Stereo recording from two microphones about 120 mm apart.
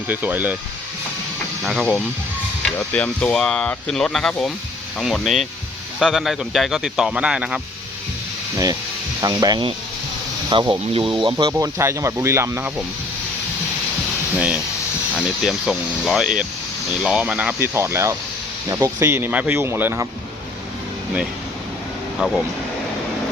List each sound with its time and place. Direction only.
0.1 s speech: 15° right (ahead or behind)
2.7 s speech: 10° left (ahead or behind); by 7.6 s 10° right (ahead or behind)
9.2 s speech: 35° right (ahead or behind)
11.6 s speech: 25° right (ahead or behind)
14.3 s speech: 10° right (ahead or behind)
17.7 s speech: 20° right (ahead or behind)
22.2 s speech: centre (ahead or behind)